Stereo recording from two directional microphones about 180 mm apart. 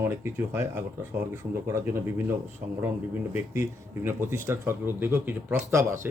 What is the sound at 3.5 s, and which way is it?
Speech, 15° right (ahead or behind).